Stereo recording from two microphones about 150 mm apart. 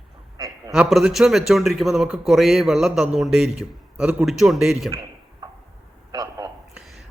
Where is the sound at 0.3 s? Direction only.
20° right (ahead or behind).